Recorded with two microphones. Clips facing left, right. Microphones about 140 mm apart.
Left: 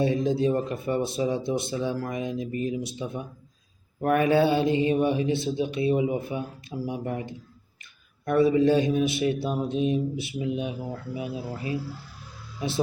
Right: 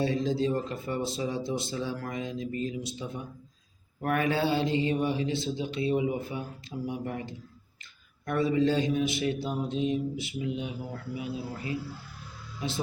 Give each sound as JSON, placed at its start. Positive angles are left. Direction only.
{"t": 0.0, "sound": "speech", "side_deg": 20}